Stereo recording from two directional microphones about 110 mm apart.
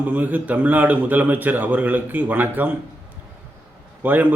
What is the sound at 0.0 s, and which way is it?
A man's voice, 15° right (ahead or behind).